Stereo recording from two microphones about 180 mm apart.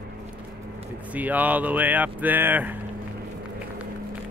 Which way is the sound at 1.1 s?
10° right (ahead or behind).